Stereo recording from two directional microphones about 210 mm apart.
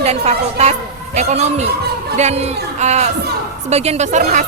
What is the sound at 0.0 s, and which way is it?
A woman's voice, 30° right (ahead or behind).